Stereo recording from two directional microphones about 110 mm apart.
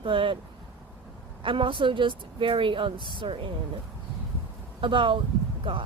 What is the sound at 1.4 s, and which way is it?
Speech, 50° right (ahead or behind).